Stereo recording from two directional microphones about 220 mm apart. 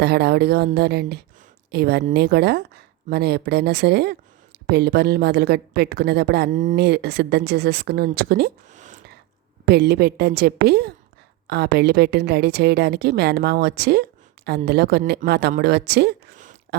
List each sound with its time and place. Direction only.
0.0 s speech: 45° right (ahead or behind)
9.6 s speech: 45° right (ahead or behind)